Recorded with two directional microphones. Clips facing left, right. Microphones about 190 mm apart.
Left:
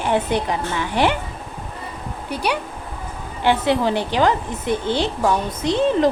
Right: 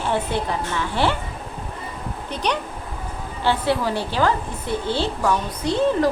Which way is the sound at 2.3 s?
10° left (ahead or behind).